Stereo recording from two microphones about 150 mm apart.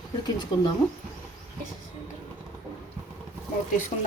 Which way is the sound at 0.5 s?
30° left (ahead or behind).